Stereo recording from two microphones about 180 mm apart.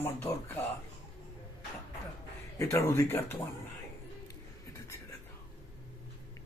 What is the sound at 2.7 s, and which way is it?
Speech, 15° left (ahead or behind).